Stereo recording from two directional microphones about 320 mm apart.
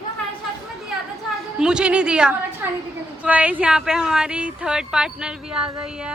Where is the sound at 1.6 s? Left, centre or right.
Centre.